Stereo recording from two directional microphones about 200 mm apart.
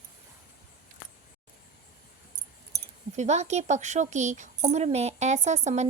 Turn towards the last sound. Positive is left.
turn(degrees=-35)  # may be behind; listen again after turning